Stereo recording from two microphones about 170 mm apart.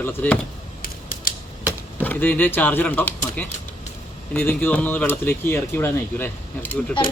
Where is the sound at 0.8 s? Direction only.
60° left (ahead or behind).